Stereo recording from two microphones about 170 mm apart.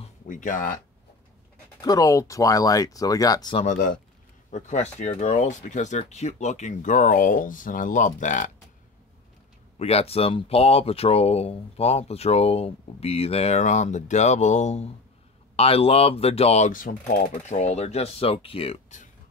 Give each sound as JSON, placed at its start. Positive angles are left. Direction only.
{"t": 0.3, "sound": "speech", "side_deg": 50}
{"t": 1.8, "sound": "speech", "side_deg": 20}
{"t": 3.5, "sound": "speech", "side_deg": 45}
{"t": 9.8, "sound": "speech", "side_deg": 35}